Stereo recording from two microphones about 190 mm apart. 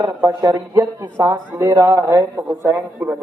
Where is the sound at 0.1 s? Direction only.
15° right (ahead or behind).